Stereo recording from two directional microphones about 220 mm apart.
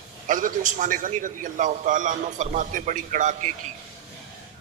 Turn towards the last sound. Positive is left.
turn(degrees=-35)  # may be behind; listen again after turning